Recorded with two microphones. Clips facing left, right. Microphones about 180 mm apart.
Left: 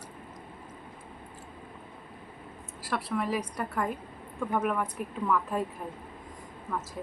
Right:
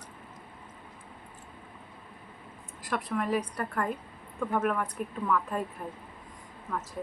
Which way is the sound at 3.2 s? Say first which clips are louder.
Right 2 dB; 5° left (ahead or behind).